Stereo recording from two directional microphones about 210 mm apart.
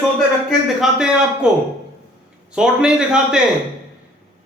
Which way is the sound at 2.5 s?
5° right (ahead or behind).